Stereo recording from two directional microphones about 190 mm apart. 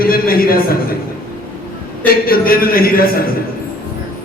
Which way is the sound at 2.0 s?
50° left (ahead or behind).